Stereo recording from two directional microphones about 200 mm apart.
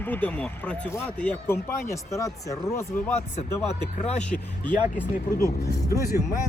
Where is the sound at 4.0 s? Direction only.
35° left (ahead or behind).